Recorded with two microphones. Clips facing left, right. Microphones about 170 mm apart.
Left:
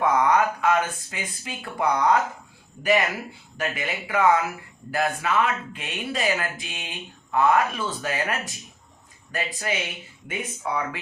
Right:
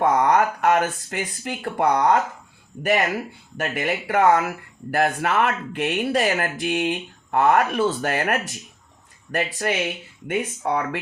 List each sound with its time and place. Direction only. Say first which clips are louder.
0.0 s speech: right 2 dB; 45° right (ahead or behind)
3.6 s speech: right 4 dB; 50° right (ahead or behind)